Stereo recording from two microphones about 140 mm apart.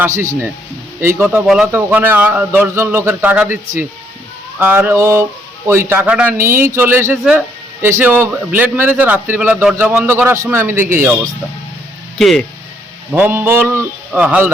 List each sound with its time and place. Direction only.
0.0 s a man's voice: 20° right (ahead or behind)
1.6 s a man's voice: 15° right (ahead or behind)
4.6 s a man's voice: 15° right (ahead or behind)
12.1 s speech: centre (ahead or behind)
13.1 s a man's voice: 15° right (ahead or behind)